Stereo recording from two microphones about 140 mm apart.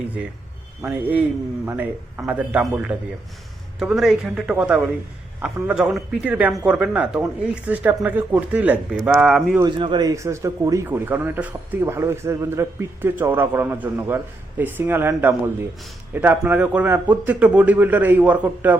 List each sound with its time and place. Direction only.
0.8 s speech: 15° right (ahead or behind)
9.6 s speech: 35° right (ahead or behind); by 18.8 s 10° right (ahead or behind)